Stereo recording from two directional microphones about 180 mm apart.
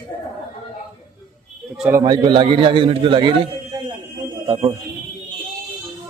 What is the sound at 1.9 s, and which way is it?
A man's voice, 20° right (ahead or behind).